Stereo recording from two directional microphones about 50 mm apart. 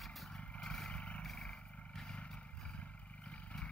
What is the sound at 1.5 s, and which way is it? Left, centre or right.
Vehicle, centre.